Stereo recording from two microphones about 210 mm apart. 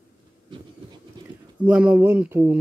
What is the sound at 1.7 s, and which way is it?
Speech, 5° right (ahead or behind).